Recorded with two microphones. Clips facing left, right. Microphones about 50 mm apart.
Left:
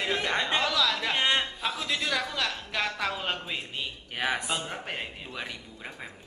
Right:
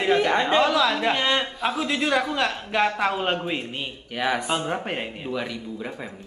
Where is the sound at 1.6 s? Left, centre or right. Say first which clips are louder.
Right 6 dB; centre.